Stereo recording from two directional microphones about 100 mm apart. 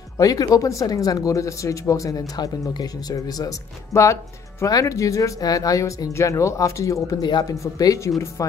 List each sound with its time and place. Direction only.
0.2 s speech: 40° left (ahead or behind)
7.2 s speech: 45° left (ahead or behind)
7.6 s speech: 35° left (ahead or behind)